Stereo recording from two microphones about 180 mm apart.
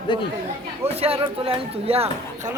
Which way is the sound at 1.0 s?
30° right (ahead or behind).